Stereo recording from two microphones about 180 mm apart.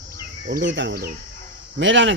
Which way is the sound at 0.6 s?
85° right.